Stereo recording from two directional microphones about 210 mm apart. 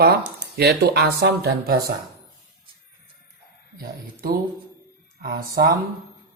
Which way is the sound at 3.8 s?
45° right (ahead or behind).